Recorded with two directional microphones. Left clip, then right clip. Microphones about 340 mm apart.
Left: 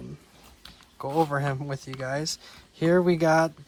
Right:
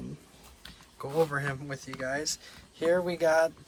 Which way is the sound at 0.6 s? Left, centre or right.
Centre.